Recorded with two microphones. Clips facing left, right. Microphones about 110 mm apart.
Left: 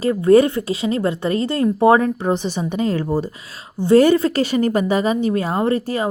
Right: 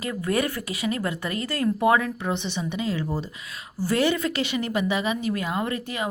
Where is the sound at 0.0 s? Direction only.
30° left (ahead or behind).